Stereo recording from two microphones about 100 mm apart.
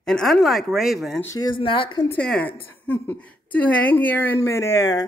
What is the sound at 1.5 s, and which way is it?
Speech, 60° left (ahead or behind).